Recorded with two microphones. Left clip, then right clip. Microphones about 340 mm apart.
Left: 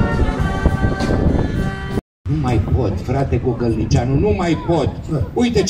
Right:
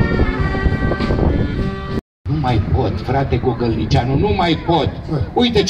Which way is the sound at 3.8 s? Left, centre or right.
Right.